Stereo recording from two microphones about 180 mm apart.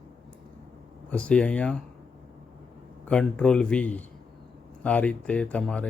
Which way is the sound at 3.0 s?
5° left (ahead or behind).